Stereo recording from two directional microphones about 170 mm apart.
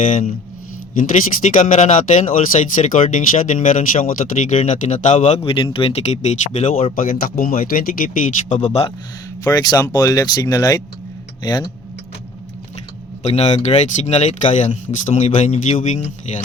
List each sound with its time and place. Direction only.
0.0 s speech: 45° left (ahead or behind)
6.9 s speech: 55° left (ahead or behind); by 8.9 s 40° left (ahead or behind)
9.4 s speech: 25° left (ahead or behind)
13.2 s speech: 40° left (ahead or behind)